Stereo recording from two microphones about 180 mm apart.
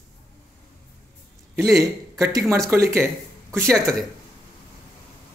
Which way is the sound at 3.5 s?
15° right (ahead or behind).